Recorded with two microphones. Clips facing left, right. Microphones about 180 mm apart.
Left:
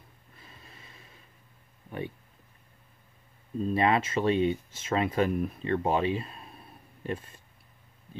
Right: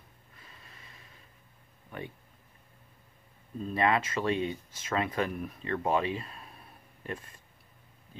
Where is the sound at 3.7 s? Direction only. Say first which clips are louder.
Left 2 dB; 25° left (ahead or behind).